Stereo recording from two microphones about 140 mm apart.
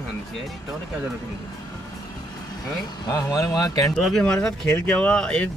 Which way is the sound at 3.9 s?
5° left (ahead or behind).